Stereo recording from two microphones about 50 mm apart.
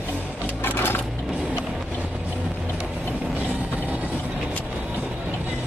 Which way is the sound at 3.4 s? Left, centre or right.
Right.